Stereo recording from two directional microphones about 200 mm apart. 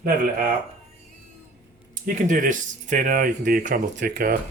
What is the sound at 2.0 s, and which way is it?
Speech, 40° right (ahead or behind).